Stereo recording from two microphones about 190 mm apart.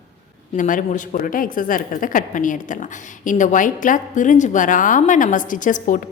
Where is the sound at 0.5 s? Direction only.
45° left (ahead or behind).